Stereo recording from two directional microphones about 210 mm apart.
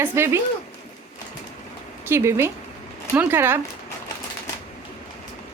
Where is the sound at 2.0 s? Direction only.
10° right (ahead or behind).